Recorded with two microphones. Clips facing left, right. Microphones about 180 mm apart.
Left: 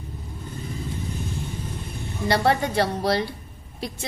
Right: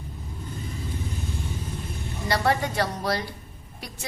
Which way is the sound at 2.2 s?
30° left (ahead or behind).